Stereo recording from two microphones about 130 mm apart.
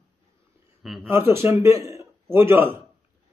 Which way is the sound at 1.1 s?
20° right (ahead or behind).